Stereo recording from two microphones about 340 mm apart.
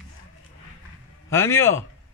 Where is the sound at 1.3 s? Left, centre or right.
Centre.